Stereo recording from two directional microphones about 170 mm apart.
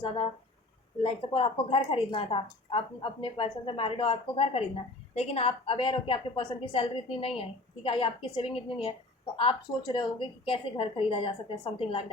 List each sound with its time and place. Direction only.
1.0 s a woman's voice: 30° left (ahead or behind)